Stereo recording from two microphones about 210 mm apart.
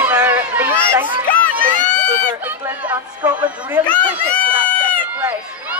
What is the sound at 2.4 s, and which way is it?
A man's voice, 10° right (ahead or behind).